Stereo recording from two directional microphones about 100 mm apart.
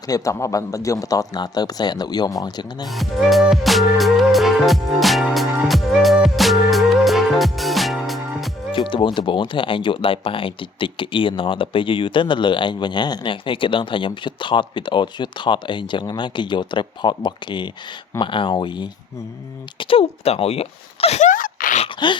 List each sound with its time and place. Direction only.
0.1 s a man's voice: 30° left (ahead or behind)
2.8 s music: centre (ahead or behind)
8.7 s speech: 60° left (ahead or behind)
19.8 s speech: 65° left (ahead or behind); by 21.2 s 85° left
22.0 s speech: 50° left (ahead or behind)